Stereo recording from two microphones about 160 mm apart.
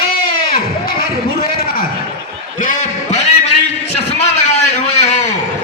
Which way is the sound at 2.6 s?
45° left (ahead or behind).